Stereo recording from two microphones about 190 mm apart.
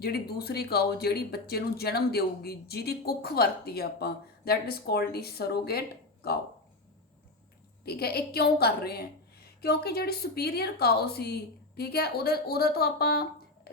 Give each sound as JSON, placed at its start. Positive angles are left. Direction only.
{"t": 0.0, "sound": "speech", "side_deg": 55}
{"t": 7.9, "sound": "speech", "side_deg": 55}